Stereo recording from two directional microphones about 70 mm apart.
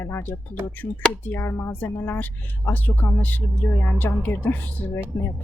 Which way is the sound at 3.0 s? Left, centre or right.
Left.